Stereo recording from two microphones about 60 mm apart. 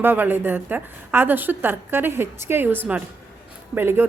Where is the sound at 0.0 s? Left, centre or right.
Right.